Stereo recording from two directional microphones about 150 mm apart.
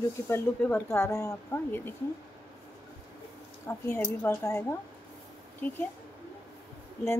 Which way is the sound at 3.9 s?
5° left (ahead or behind).